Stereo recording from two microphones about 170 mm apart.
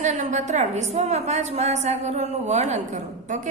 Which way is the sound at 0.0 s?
45° right (ahead or behind).